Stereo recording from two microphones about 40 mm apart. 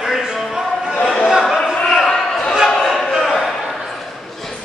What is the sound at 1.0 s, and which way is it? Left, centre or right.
Chatter, left.